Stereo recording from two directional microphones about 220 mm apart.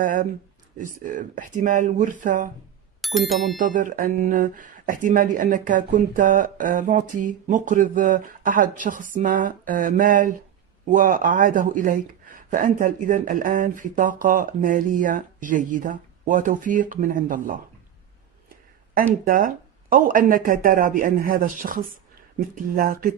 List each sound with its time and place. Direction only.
0.0 s speech: 40° right (ahead or behind)
3.0 s speech: centre (ahead or behind)
3.5 s speech: 35° right (ahead or behind)
19.2 s speech: 40° right (ahead or behind)